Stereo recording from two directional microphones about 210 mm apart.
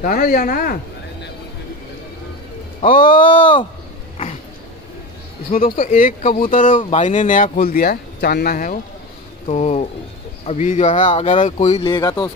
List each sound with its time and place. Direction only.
0.0 s speech: 40° left (ahead or behind)
2.8 s speech: 40° left (ahead or behind)
5.5 s speech: 40° left (ahead or behind)
9.5 s speech: 30° left (ahead or behind)
11.1 s speech: 25° left (ahead or behind)
11.9 s speech: 15° left (ahead or behind)